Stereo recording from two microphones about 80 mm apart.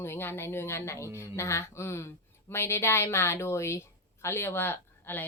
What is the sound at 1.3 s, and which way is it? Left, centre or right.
Speech, left.